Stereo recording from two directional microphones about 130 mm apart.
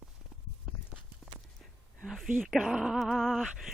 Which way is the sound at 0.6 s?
Centre (ahead or behind).